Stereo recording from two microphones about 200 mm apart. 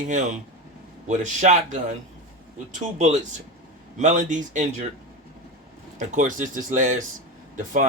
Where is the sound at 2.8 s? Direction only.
35° right (ahead or behind).